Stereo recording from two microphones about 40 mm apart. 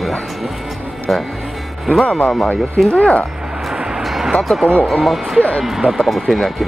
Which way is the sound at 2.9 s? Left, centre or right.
Left.